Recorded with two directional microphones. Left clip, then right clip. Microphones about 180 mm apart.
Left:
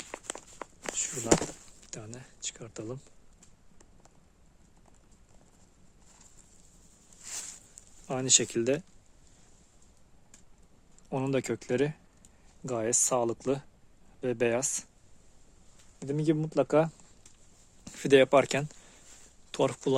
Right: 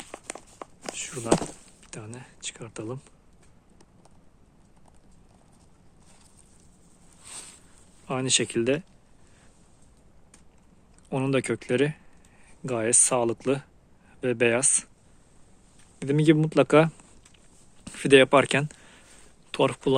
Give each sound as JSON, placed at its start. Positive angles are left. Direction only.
{"t": 0.1, "sound": "walk", "side_deg": 15}
{"t": 8.0, "sound": "speech", "side_deg": 10}
{"t": 11.1, "sound": "speech", "side_deg": 10}
{"t": 16.0, "sound": "speech", "side_deg": -5}
{"t": 17.8, "sound": "speech", "side_deg": 10}
{"t": 19.5, "sound": "speech", "side_deg": 10}